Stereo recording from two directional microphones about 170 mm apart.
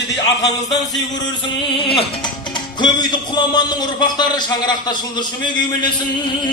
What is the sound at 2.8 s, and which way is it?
Music, 25° left (ahead or behind).